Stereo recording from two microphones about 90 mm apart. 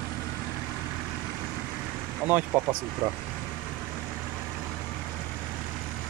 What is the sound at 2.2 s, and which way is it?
Speech, 20° right (ahead or behind).